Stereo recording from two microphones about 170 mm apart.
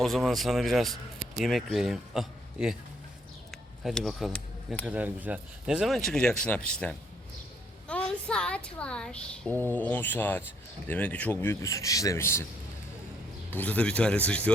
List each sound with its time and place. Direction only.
0.0 s speech: centre (ahead or behind)
3.8 s speech: centre (ahead or behind)
4.9 s a woman's voice: 10° right (ahead or behind); by 12.5 s 15° left (ahead or behind)
13.5 s a man's voice: 10° left (ahead or behind)